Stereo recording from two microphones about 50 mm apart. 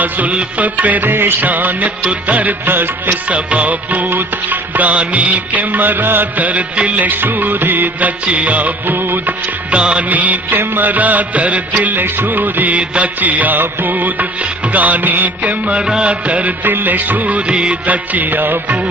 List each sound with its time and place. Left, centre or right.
0.0 s music: right
3.3 s music: right
9.7 s music: right